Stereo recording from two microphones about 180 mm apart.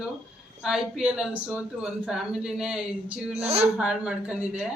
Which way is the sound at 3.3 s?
35° right (ahead or behind).